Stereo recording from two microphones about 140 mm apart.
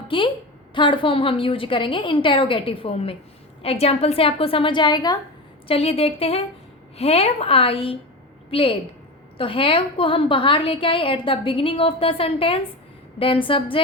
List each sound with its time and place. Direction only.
0.1 s a woman's voice: 35° left (ahead or behind)
5.6 s a woman's voice: 45° left (ahead or behind)